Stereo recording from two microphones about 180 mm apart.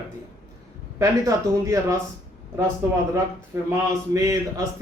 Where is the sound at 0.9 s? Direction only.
15° right (ahead or behind).